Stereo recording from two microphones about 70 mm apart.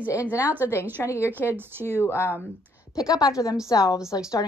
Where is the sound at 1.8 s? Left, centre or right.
Left.